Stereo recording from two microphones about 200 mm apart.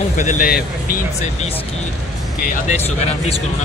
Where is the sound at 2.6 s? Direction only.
35° left (ahead or behind).